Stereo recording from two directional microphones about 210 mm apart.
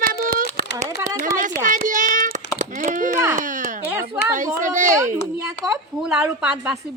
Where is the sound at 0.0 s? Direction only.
45° right (ahead or behind).